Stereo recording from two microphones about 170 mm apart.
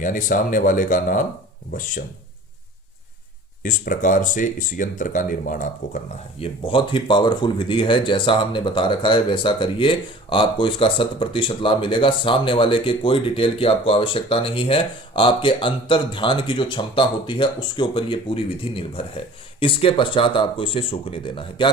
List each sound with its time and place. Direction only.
0.0 s speech: 50° left (ahead or behind)
3.6 s speech: 55° left (ahead or behind)
6.4 s speech: 30° left (ahead or behind)